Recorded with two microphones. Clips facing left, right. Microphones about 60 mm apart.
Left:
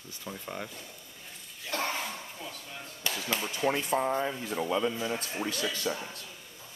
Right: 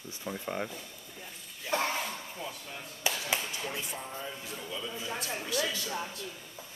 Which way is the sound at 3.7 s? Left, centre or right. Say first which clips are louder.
Left 11 dB; left.